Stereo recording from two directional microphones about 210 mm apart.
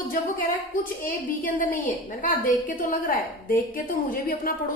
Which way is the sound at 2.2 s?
40° left (ahead or behind).